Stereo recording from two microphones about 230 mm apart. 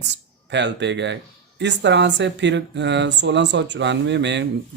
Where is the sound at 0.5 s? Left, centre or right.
Right.